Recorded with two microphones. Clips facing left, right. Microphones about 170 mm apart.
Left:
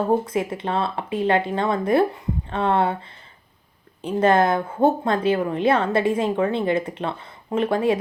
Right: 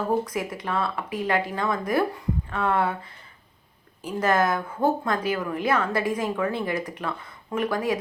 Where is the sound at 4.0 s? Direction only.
30° left (ahead or behind).